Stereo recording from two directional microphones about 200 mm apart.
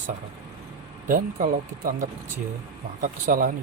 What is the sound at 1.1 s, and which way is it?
Speech, 40° right (ahead or behind).